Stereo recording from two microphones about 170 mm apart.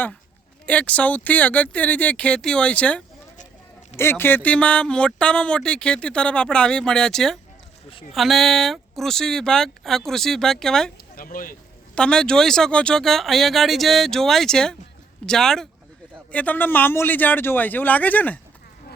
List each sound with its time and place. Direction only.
0.6 s speech: 5° left (ahead or behind)
11.2 s speech: 55° left (ahead or behind)
11.9 s speech: 5° left (ahead or behind)